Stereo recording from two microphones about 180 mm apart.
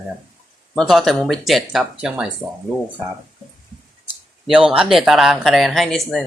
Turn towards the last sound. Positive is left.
turn(degrees=5)  # may be behind; listen again after turning